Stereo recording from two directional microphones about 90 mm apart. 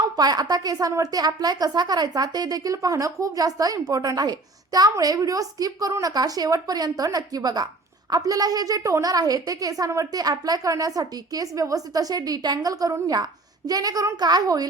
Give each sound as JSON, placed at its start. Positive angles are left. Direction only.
{"t": 0.0, "sound": "a woman's voice", "side_deg": -45}